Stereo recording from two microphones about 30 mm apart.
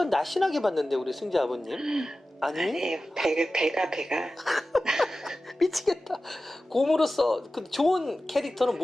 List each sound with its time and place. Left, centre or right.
0.0 s speech: centre
1.8 s speech: centre
2.4 s speech: centre
2.7 s speech: centre
4.4 s music: centre
4.8 s a sound: centre
5.5 s speech: centre